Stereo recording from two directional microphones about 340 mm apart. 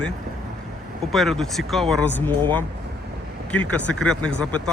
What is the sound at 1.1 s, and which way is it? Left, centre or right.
Speech, centre.